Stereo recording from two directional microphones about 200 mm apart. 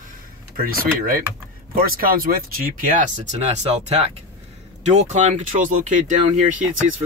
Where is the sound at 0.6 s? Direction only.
45° right (ahead or behind).